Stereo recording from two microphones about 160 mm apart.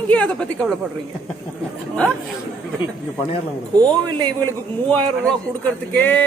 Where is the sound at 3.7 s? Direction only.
25° right (ahead or behind).